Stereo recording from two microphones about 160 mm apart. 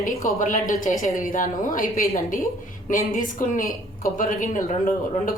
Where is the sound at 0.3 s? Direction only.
55° left (ahead or behind).